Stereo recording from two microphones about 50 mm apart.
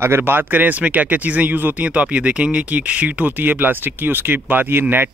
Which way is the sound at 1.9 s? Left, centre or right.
Right.